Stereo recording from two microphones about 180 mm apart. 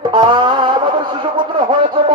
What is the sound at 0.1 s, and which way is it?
Music, 25° right (ahead or behind).